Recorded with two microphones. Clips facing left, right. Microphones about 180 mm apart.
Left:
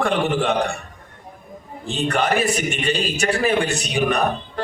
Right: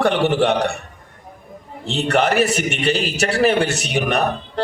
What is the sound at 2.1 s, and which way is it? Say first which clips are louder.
Speech: right 4 dB; 75° right (ahead or behind).